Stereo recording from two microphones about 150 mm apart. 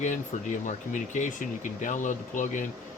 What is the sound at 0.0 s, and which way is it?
Speech, 55° left (ahead or behind).